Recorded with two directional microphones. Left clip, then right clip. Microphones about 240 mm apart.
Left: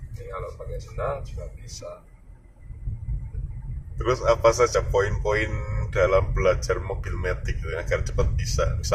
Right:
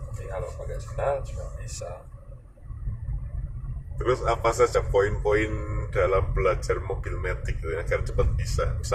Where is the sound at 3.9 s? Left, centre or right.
Centre.